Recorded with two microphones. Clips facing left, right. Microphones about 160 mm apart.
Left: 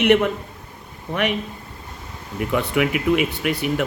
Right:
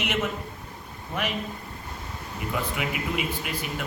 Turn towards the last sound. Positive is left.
turn(degrees=70)  # may be behind; listen again after turning